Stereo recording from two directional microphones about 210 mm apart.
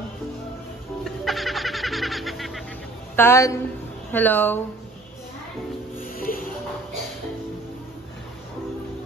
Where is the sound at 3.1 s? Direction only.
10° left (ahead or behind).